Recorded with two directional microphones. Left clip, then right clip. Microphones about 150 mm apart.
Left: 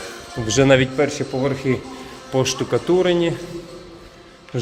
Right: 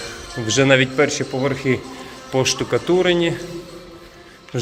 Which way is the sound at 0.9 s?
5° left (ahead or behind).